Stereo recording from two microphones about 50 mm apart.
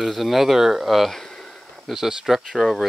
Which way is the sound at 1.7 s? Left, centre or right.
Centre.